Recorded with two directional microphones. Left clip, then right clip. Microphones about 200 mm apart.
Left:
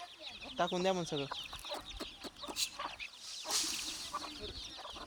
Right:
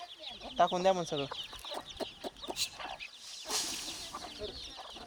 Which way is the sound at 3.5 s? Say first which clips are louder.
Even; 55° right (ahead or behind).